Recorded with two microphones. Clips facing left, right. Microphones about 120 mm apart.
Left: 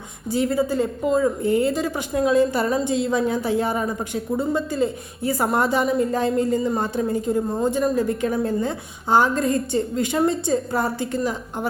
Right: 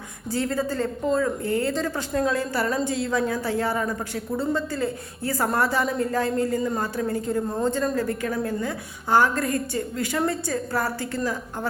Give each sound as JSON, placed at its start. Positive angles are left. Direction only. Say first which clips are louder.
{"t": 0.3, "sound": "speech", "louder": "left 4 dB", "side_deg": 15}